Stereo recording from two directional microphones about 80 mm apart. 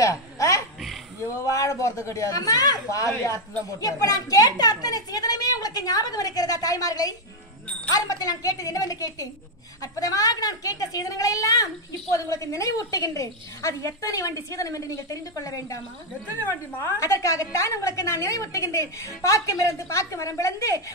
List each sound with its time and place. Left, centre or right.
0.0 s a sound: left
1.4 s a woman's voice: left
3.0 s a woman's voice: left
16.4 s a woman's voice: left
17.0 s a woman's voice: left